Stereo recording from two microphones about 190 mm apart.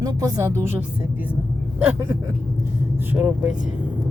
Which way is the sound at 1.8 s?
5° right (ahead or behind).